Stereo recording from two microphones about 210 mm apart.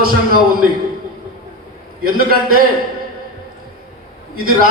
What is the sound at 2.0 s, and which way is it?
Speech, 45° right (ahead or behind).